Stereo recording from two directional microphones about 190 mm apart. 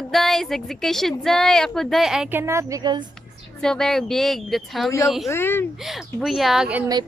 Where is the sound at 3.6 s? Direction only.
5° left (ahead or behind).